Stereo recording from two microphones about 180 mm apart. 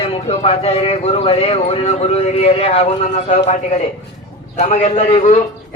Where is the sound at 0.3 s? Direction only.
35° left (ahead or behind).